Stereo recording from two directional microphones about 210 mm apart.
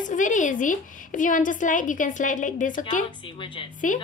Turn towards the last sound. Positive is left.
turn(degrees=40)  # may be behind; listen again after turning